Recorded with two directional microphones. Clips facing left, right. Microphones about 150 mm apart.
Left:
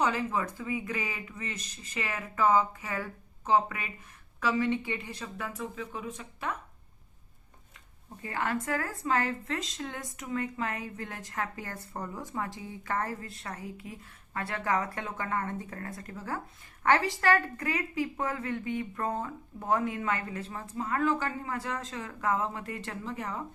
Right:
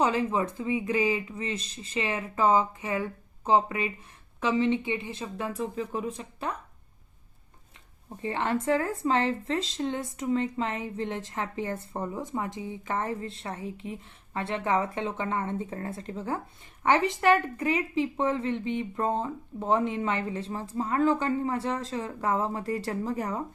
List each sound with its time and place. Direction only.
0.0 s speech: 30° right (ahead or behind)
8.2 s speech: 25° right (ahead or behind)